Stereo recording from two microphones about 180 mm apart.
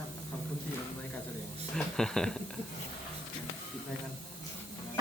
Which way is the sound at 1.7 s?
5° left (ahead or behind).